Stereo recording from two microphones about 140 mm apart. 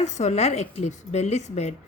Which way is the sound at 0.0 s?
55° left (ahead or behind).